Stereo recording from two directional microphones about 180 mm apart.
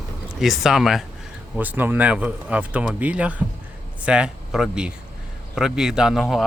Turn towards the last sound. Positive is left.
turn(degrees=0)  # may be behind; listen again after turning